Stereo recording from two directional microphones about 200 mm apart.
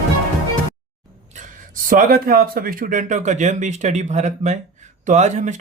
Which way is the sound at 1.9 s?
45° right (ahead or behind).